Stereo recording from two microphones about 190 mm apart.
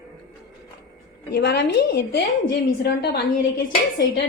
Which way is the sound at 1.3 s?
60° left (ahead or behind).